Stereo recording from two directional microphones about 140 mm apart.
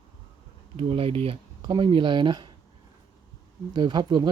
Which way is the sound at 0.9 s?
40° right (ahead or behind).